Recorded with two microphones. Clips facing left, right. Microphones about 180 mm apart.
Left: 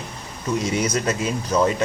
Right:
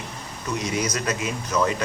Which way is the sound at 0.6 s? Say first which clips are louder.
Left 4 dB; 25° left (ahead or behind).